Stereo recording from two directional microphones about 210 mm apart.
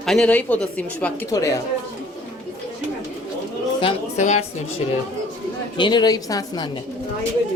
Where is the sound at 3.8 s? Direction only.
30° left (ahead or behind).